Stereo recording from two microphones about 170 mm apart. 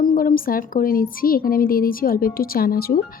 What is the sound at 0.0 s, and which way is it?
Speech, 55° left (ahead or behind).